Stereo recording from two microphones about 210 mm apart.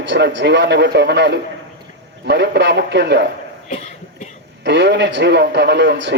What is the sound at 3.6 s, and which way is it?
Cough, 35° left (ahead or behind).